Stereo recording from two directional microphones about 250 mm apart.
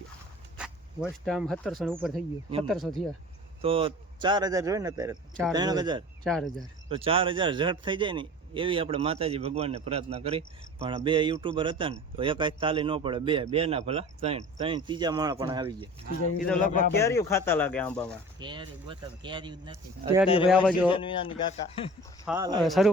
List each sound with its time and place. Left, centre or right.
1.0 s speech: centre
3.6 s speech: right
6.2 s speech: centre
6.8 s a man's voice: right
16.7 s speech: left
17.0 s speech: centre
18.3 s speech: centre
20.2 s speech: left
22.3 s speech: centre
22.6 s speech: centre